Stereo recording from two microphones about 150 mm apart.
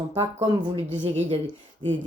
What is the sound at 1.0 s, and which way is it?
Speech, 45° right (ahead or behind).